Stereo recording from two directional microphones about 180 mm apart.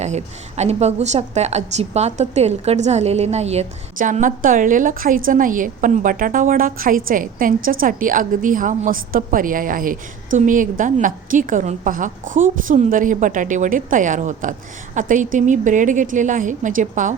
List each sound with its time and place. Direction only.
0.0 s a woman's voice: 40° right (ahead or behind)